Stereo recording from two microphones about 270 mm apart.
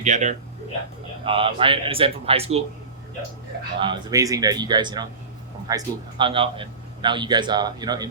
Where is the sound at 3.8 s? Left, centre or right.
Centre.